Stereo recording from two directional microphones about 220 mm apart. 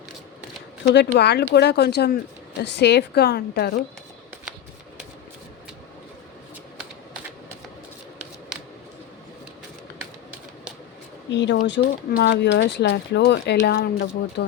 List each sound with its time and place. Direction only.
0.9 s speech: 50° left (ahead or behind)
11.3 s speech: 55° left (ahead or behind)